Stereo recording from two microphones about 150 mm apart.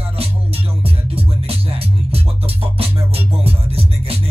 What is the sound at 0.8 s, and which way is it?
Music, 40° right (ahead or behind).